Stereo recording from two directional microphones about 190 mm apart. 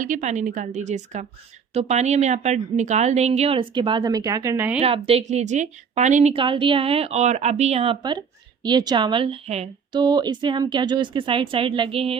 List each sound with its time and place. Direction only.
0.0 s a woman's voice: 40° right (ahead or behind); by 4.8 s 10° right (ahead or behind)
4.8 s a woman's voice: 30° right (ahead or behind)